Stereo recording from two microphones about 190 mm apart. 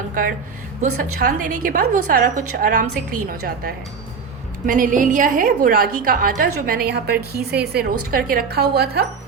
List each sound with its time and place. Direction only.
0.1 s a woman's voice: 45° right (ahead or behind)